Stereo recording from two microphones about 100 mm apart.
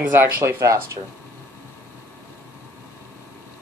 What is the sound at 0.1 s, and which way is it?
Speech, 25° right (ahead or behind).